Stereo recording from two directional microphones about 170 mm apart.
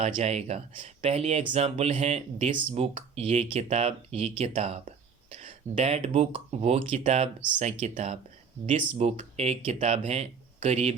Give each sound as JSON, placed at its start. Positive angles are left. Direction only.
{"t": 0.0, "sound": "speech", "side_deg": -40}